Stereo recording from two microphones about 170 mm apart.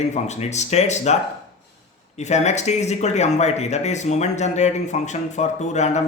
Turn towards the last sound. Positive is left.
turn(degrees=45)  # may be behind; listen again after turning